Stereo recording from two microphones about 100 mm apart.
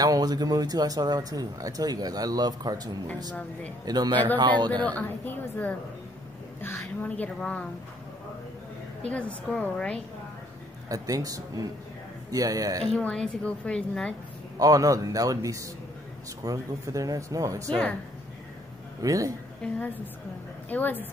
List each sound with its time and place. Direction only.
0.0 s a man's voice: 40° right (ahead or behind)
4.8 s a woman's voice: 20° left (ahead or behind)
9.0 s a woman's voice: 10° left (ahead or behind)
10.9 s speech: 35° right (ahead or behind)
12.9 s a woman's voice: 10° left (ahead or behind)
14.6 s speech: 35° right (ahead or behind)
19.0 s speech: 35° right (ahead or behind)
19.6 s a woman's voice: 15° left (ahead or behind)